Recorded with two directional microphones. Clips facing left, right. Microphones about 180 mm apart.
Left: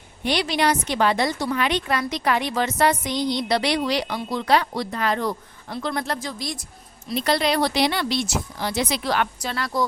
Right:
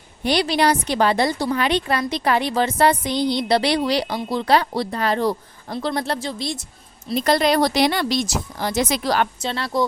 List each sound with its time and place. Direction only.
0.3 s a woman's voice: 35° right (ahead or behind)
7.1 s speech: 45° right (ahead or behind)
9.4 s speech: 25° right (ahead or behind)